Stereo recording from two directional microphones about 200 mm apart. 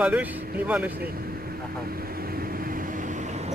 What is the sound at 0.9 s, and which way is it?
Vehicle, 50° right (ahead or behind).